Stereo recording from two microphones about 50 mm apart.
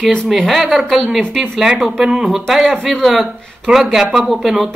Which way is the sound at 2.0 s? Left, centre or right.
Centre.